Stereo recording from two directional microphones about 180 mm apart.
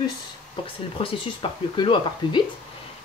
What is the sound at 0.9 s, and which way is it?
Speech, 30° left (ahead or behind).